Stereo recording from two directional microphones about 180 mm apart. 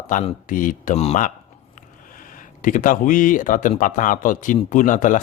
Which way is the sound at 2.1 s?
50° left (ahead or behind).